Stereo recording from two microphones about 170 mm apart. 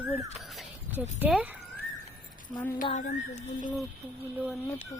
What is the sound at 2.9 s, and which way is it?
Speech, 45° left (ahead or behind).